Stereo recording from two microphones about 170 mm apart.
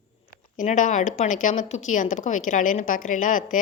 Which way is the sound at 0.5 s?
50° left (ahead or behind).